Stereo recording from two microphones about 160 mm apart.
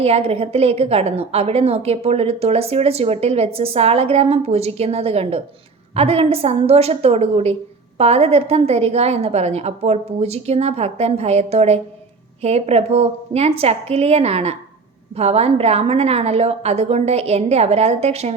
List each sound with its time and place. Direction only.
0.0 s a woman's voice: 40° right (ahead or behind)